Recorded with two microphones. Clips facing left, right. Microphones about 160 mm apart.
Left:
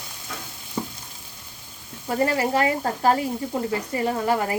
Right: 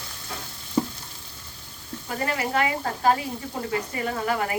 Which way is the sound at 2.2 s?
35° left (ahead or behind).